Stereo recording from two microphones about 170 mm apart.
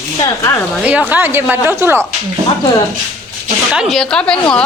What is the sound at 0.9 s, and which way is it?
A woman's voice, 10° right (ahead or behind).